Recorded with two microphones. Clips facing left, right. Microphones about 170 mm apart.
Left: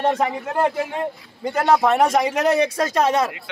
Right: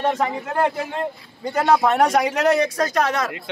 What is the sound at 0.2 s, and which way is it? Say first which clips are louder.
A man's voice: left 1 dB; 10° left (ahead or behind).